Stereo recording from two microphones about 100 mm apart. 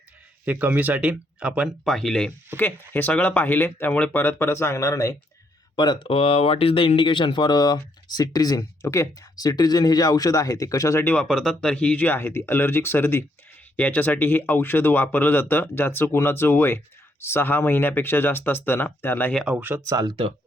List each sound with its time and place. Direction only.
0.4 s speech: 15° right (ahead or behind)
1.6 s speech: 5° left (ahead or behind)
2.6 s speech: 20° left (ahead or behind)
5.7 s speech: 50° left (ahead or behind); by 11.0 s 35° left (ahead or behind)
11.0 s speech: 15° left (ahead or behind)
11.3 s speech: 5° left (ahead or behind); by 19.3 s 20° left (ahead or behind)
19.5 s speech: 20° right (ahead or behind)
19.8 s speech: 35° right (ahead or behind)